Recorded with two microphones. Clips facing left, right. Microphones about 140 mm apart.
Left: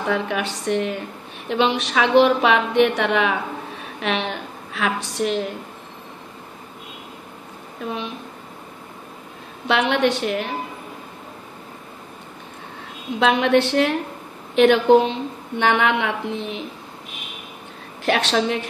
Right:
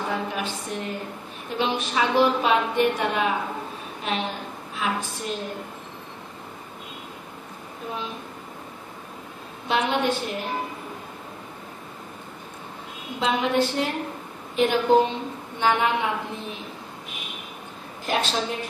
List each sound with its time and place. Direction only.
0.1 s a woman's voice: 75° left (ahead or behind)
9.7 s a woman's voice: 75° left (ahead or behind)
13.2 s a woman's voice: 75° left (ahead or behind)
18.0 s a woman's voice: 80° left